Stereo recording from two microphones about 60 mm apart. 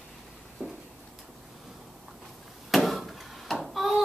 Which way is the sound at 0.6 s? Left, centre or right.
Centre.